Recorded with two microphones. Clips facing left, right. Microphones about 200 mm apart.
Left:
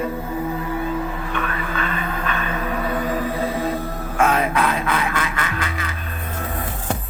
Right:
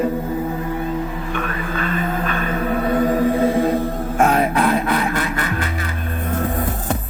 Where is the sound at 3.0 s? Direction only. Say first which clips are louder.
Right 7 dB; 45° right (ahead or behind).